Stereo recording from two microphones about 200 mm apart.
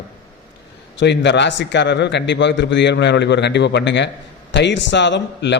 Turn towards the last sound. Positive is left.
turn(degrees=60)  # may be behind; listen again after turning